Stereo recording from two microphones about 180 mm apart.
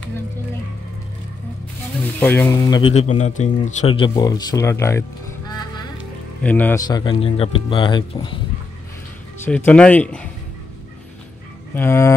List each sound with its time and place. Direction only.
2.1 s speech: 10° left (ahead or behind)
2.9 s speech: 40° left (ahead or behind); by 5.0 s 15° left (ahead or behind)
5.5 s music: 25° left (ahead or behind)
6.4 s speech: 10° left (ahead or behind)
6.9 s speech: 25° left (ahead or behind)
9.4 s speech: 10° left (ahead or behind)
11.7 s speech: 15° left (ahead or behind)